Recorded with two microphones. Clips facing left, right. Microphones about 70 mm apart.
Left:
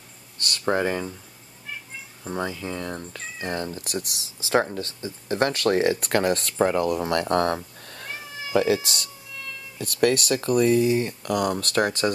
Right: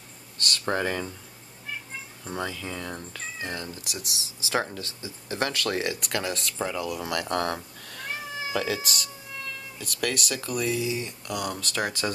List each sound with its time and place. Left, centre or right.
0.5 s speech: centre
2.2 s speech: centre
3.4 s speech: left
7.0 s speech: left